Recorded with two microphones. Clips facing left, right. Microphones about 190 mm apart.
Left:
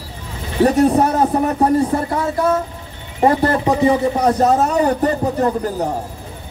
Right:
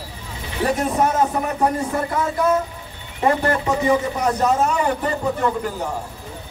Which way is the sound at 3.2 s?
35° left (ahead or behind).